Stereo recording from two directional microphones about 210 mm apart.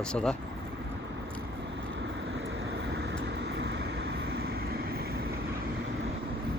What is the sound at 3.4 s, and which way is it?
Vehicle, 55° right (ahead or behind).